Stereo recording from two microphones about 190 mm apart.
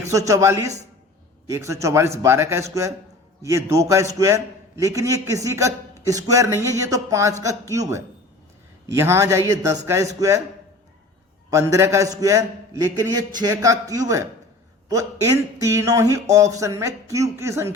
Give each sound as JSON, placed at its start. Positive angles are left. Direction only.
{"t": 0.0, "sound": "speech", "side_deg": -15}
{"t": 11.5, "sound": "speech", "side_deg": -15}